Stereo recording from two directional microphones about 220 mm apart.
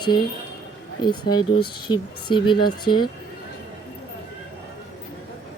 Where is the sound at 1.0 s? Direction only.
20° left (ahead or behind).